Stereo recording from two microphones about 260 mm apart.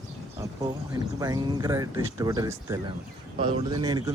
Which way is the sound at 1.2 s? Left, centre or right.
Centre.